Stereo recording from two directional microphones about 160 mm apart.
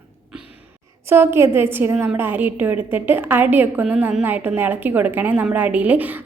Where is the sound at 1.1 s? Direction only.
15° right (ahead or behind).